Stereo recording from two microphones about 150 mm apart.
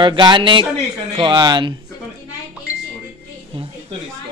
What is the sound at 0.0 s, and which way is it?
Speech, 30° right (ahead or behind).